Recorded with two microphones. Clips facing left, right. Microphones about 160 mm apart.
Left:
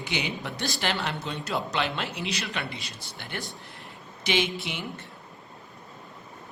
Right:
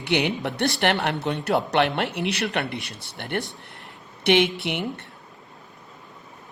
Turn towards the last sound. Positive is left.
turn(degrees=-60)  # may be behind; listen again after turning